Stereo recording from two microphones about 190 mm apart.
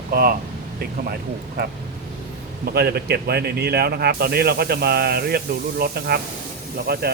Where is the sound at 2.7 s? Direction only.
55° right (ahead or behind).